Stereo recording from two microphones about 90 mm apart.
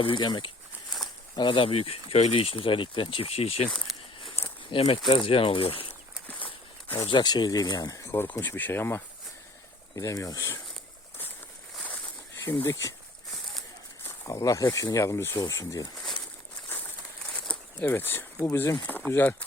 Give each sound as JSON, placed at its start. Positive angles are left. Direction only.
{"t": 0.0, "sound": "speech", "side_deg": 60}
{"t": 3.7, "sound": "speech", "side_deg": 5}
{"t": 4.7, "sound": "speech", "side_deg": 70}
{"t": 6.2, "sound": "a sound", "side_deg": 20}
{"t": 7.1, "sound": "speech", "side_deg": 55}
{"t": 8.3, "sound": "speech", "side_deg": 20}
{"t": 9.9, "sound": "speech", "side_deg": 40}
{"t": 12.6, "sound": "speech", "side_deg": 35}
{"t": 14.0, "sound": "a sound", "side_deg": 30}
{"t": 14.4, "sound": "speech", "side_deg": 40}
{"t": 16.6, "sound": "crumpling", "side_deg": 20}
{"t": 17.3, "sound": "a sound", "side_deg": 10}
{"t": 17.8, "sound": "speech", "side_deg": 25}